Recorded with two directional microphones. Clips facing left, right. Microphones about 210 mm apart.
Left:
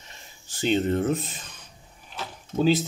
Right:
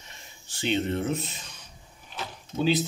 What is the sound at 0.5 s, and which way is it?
Speech, 45° left (ahead or behind).